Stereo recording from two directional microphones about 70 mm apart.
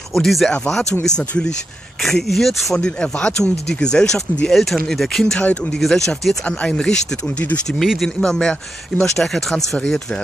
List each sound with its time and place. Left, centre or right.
0.1 s speech: centre
3.0 s speech: centre
5.4 s speech: centre
5.8 s speech: centre
6.4 s speech: centre